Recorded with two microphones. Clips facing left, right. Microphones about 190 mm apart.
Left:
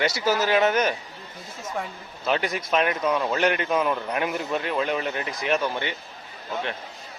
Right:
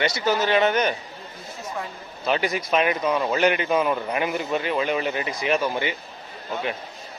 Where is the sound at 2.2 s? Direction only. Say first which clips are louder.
Right 2 dB; centre (ahead or behind).